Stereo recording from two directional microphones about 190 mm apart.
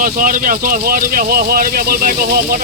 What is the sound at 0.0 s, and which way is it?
Speech, 45° right (ahead or behind).